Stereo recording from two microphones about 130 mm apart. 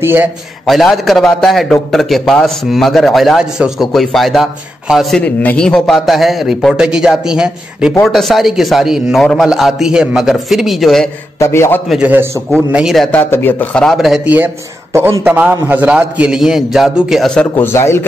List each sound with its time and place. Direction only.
0.0 s a man's voice: 15° right (ahead or behind)
0.7 s a man's voice: centre (ahead or behind)
5.2 s a man's voice: 10° left (ahead or behind)
11.3 s a man's voice: 20° left (ahead or behind)
11.9 s a man's voice: 10° right (ahead or behind)
13.1 s speech: 15° left (ahead or behind)
13.8 s a man's voice: centre (ahead or behind)
14.2 s a man's voice: 15° right (ahead or behind); by 17.6 s 5° left (ahead or behind)
17.7 s speech: 20° left (ahead or behind)